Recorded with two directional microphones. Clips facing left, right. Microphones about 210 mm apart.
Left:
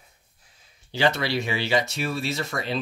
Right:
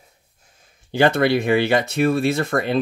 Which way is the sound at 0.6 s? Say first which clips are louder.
Right 6 dB; 50° right (ahead or behind).